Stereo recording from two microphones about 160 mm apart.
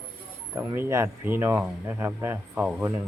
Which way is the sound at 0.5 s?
15° right (ahead or behind).